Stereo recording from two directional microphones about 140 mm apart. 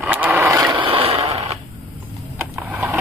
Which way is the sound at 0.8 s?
40° right (ahead or behind).